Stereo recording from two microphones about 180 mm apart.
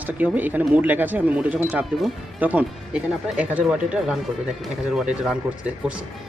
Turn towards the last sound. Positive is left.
turn(degrees=-5)  # may be behind; listen again after turning